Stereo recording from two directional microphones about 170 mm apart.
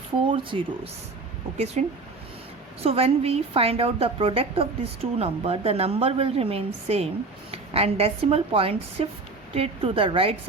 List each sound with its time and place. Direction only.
0.5 s a woman's voice: 35° right (ahead or behind)
2.8 s a woman's voice: 35° right (ahead or behind)